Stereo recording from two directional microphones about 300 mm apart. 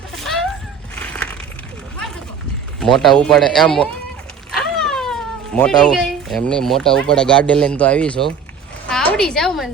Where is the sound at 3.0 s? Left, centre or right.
Centre.